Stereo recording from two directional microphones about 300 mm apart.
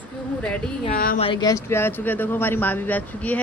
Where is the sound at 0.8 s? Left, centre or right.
Left.